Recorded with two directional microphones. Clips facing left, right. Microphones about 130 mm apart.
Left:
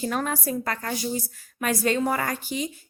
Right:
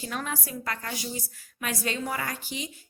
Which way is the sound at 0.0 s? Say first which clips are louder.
Left 7 dB; 45° left (ahead or behind).